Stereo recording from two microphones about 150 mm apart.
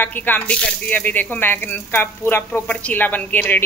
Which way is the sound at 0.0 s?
10° left (ahead or behind).